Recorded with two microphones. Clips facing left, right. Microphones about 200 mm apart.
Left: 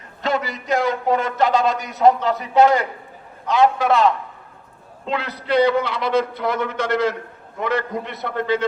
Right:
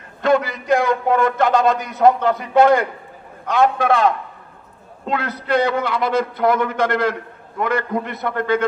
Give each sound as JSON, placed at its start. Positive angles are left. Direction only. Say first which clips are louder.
{"t": 0.2, "sound": "a man's voice", "louder": "right 6 dB", "side_deg": -55}